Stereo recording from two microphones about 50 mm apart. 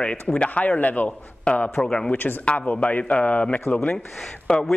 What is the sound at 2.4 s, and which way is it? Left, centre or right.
A man's voice, left.